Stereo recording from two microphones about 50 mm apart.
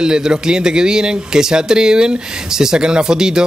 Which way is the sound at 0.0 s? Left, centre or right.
Centre.